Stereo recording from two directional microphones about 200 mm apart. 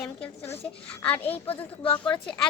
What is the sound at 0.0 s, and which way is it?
A child's voice, 10° left (ahead or behind).